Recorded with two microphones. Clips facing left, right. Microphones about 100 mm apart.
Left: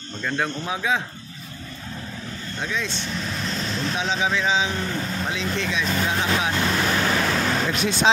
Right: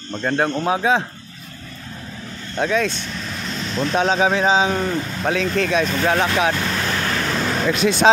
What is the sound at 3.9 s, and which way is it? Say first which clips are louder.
Speech: right 8 dB; 50° right (ahead or behind).